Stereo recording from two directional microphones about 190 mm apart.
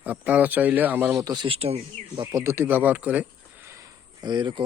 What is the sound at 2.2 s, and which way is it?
Speech, 15° right (ahead or behind).